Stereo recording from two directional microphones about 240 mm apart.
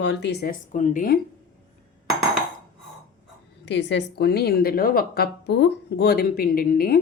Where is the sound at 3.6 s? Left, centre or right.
Left.